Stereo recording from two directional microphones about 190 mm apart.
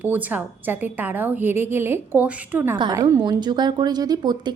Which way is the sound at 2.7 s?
20° right (ahead or behind).